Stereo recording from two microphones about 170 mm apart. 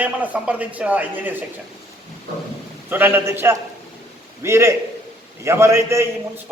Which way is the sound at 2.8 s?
10° right (ahead or behind).